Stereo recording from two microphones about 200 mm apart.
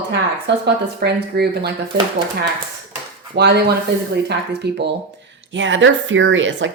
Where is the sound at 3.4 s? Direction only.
55° right (ahead or behind).